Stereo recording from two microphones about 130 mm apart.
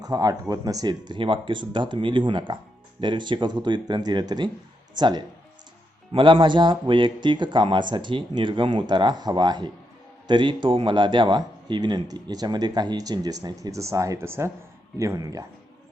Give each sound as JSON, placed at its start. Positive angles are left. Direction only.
{"t": 0.0, "sound": "speech", "side_deg": -30}